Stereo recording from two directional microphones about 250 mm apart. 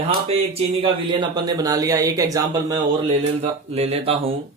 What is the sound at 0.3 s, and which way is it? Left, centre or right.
Speech, right.